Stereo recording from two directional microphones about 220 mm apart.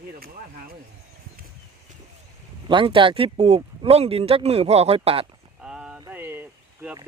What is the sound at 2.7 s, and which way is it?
Speech, 25° right (ahead or behind).